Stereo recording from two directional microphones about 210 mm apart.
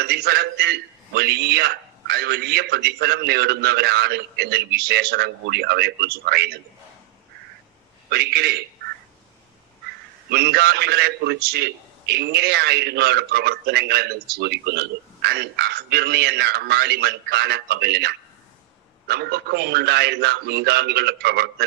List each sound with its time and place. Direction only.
0.0 s a man's voice: 50° right (ahead or behind)
8.1 s a man's voice: 50° right (ahead or behind)
10.3 s a man's voice: 50° right (ahead or behind)